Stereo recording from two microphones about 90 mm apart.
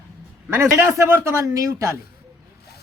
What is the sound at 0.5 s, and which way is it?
A man's voice, 30° right (ahead or behind).